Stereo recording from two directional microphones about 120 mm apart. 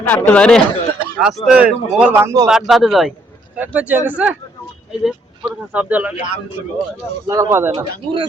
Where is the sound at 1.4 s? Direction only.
10° right (ahead or behind).